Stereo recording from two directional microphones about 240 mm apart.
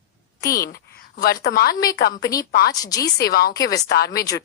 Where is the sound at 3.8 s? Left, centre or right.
Left.